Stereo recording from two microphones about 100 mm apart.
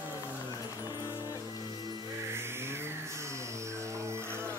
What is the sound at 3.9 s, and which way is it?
Music, 25° right (ahead or behind).